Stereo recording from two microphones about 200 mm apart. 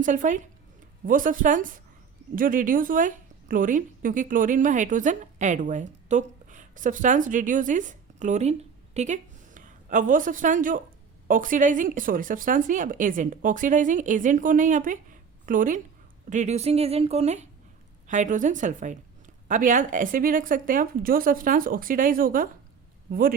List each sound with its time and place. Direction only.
0.0 s a woman's voice: 40° right (ahead or behind)